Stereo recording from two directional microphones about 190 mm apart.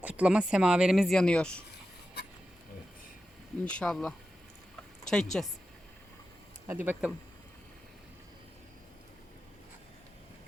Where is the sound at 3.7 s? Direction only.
5° left (ahead or behind).